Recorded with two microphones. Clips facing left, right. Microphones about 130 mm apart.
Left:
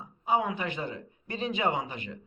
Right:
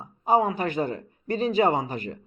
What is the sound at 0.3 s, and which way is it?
Speech, 40° right (ahead or behind).